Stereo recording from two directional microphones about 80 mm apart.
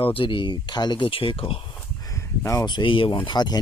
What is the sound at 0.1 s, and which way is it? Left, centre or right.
Speech, left.